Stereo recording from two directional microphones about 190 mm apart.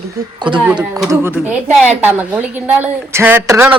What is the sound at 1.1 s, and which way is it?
A woman's voice, 10° right (ahead or behind).